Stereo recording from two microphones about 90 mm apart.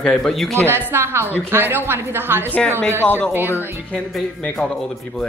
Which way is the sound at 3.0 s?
20° left (ahead or behind).